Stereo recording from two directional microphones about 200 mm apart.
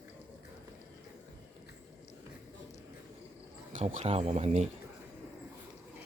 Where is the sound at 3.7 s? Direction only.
40° right (ahead or behind).